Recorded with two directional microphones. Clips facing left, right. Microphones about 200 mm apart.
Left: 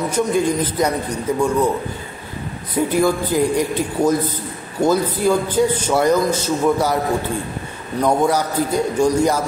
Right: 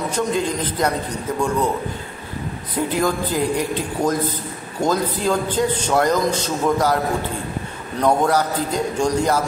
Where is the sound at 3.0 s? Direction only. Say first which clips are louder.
Left 3 dB; 10° left (ahead or behind).